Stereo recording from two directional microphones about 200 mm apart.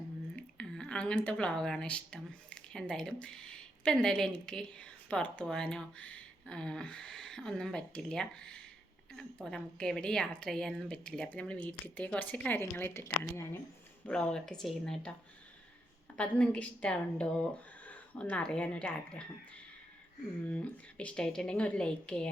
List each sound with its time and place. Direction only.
0.3 s a woman's voice: 5° left (ahead or behind)
16.1 s a woman's voice: 5° left (ahead or behind)
20.5 s a woman's voice: 5° left (ahead or behind)